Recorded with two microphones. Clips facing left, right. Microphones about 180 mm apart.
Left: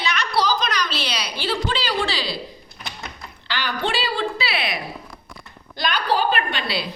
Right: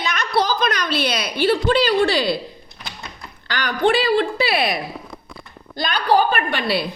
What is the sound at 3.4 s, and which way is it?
A woman's voice, 50° right (ahead or behind).